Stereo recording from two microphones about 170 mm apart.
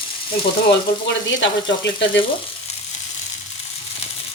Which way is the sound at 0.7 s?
90° left.